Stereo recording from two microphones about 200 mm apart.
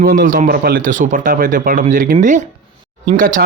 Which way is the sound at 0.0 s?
40° right (ahead or behind).